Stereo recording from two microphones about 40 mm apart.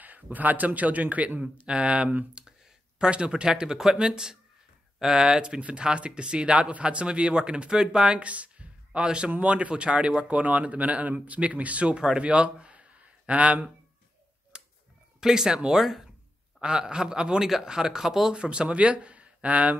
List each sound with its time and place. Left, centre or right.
0.0 s speech: right
1.4 s speech: right
3.0 s speech: right
4.9 s a sound: centre
5.2 s speech: centre
8.2 s a sound: right
9.0 s speech: right
12.2 s a sound: right
14.5 s a sound: right
15.1 s speech: centre
15.8 s speech: centre
16.6 s speech: centre
18.3 s speech: right